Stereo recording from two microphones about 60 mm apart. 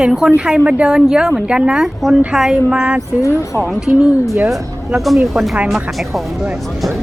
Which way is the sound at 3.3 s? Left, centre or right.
Left.